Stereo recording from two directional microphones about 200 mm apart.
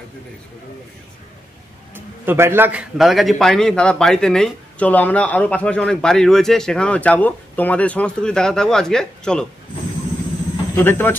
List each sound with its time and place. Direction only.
2.0 s a man's voice: 10° right (ahead or behind); by 9.5 s 5° left (ahead or behind)
10.8 s speech: 10° left (ahead or behind)